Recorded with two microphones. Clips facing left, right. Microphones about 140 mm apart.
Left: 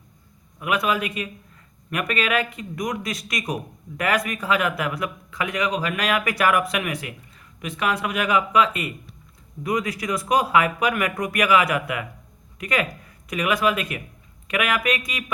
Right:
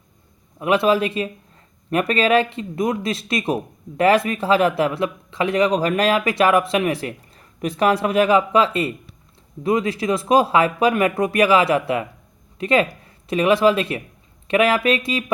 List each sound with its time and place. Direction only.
0.6 s speech: 30° right (ahead or behind)